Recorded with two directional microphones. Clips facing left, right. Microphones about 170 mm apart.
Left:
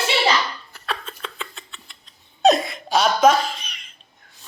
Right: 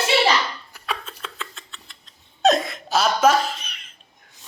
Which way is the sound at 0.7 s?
10° right (ahead or behind).